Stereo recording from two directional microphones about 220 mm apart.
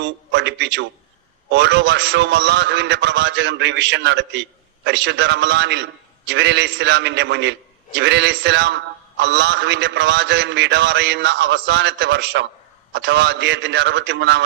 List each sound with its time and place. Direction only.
0.0 s a man's voice: 50° right (ahead or behind)